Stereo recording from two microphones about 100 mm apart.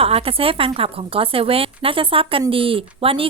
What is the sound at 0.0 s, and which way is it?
A woman's voice, 75° right (ahead or behind).